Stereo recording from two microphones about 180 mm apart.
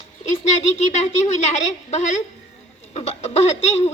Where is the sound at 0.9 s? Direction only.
35° left (ahead or behind).